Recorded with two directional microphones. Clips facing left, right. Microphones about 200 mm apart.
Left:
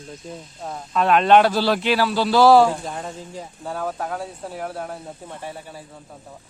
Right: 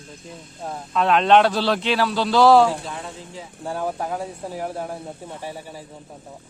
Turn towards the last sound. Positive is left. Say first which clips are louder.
# right 1 dB
turn(degrees=-10)  # may be behind; listen again after turning